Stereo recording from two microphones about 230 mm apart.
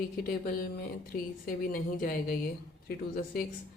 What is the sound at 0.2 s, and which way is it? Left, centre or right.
Speech, left.